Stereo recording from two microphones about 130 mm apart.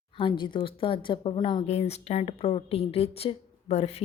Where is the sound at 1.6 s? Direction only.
55° left (ahead or behind).